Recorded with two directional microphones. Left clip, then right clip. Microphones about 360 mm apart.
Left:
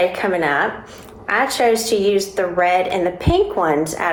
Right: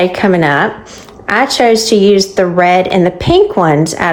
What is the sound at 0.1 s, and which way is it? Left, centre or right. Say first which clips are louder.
A woman's voice: right 7 dB; right.